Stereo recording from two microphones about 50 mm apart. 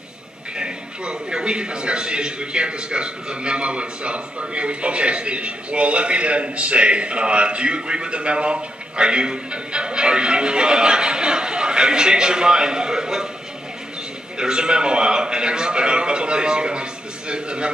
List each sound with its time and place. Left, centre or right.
0.6 s a man's voice: centre
14.4 s a man's voice: centre